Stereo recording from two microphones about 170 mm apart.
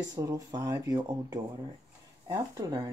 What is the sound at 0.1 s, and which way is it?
Speech, 20° right (ahead or behind).